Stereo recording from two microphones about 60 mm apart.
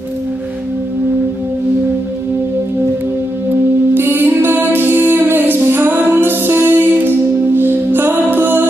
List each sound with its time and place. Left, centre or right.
3.9 s music: right